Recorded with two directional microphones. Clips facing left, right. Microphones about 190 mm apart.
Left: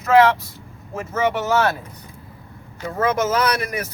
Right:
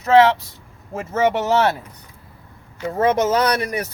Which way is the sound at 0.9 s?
35° right (ahead or behind).